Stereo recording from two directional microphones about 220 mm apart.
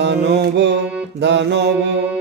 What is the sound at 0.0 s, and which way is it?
Music, 50° right (ahead or behind).